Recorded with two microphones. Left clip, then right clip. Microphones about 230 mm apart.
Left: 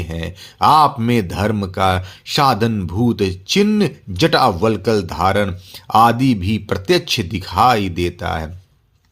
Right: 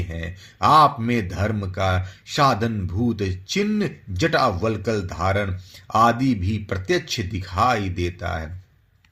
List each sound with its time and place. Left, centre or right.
0.1 s speech: left